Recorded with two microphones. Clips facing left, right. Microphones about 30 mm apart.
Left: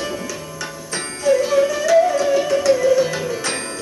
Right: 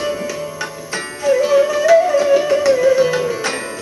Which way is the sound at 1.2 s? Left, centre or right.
Centre.